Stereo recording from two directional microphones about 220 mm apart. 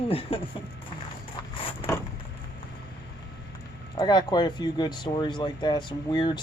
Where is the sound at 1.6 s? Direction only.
25° left (ahead or behind).